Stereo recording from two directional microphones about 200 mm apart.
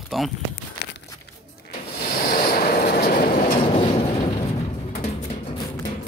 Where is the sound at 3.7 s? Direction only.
30° left (ahead or behind).